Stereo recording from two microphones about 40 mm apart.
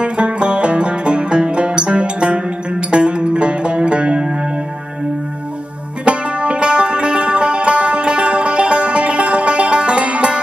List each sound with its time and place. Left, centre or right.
0.0 s music: right
6.0 s music: right